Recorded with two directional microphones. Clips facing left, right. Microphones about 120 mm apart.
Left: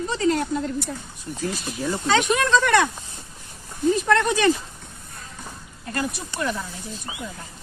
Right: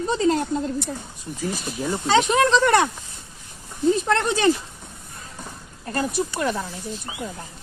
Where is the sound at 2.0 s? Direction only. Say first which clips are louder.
Right 3 dB; 30° right (ahead or behind).